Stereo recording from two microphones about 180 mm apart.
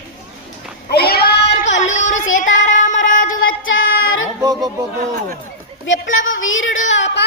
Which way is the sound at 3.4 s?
90° left.